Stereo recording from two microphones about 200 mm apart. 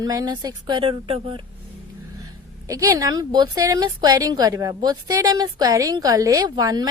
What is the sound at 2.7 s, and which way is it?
A woman's voice, 15° right (ahead or behind).